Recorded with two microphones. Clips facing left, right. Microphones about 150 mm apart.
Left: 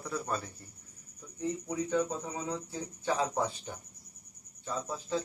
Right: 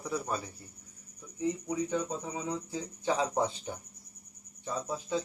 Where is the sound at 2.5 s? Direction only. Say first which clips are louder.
Right 1 dB; 15° right (ahead or behind).